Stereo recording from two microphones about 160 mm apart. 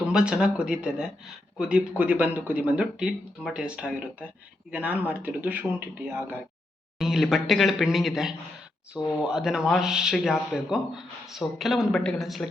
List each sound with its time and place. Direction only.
0.1 s a man's voice: 5° right (ahead or behind)
7.0 s a man's voice: centre (ahead or behind)